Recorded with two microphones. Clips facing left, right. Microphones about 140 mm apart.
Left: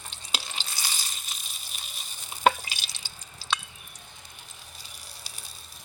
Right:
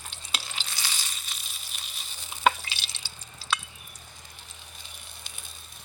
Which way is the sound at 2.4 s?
45° left (ahead or behind).